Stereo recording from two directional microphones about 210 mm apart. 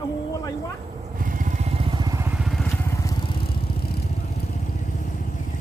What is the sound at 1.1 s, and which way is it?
Vehicle, 40° right (ahead or behind).